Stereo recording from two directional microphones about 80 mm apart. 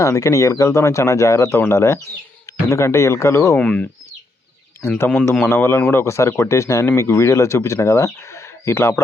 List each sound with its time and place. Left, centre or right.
0.0 s speech: left
3.6 s speech: centre
5.0 s speech: centre
5.5 s speech: left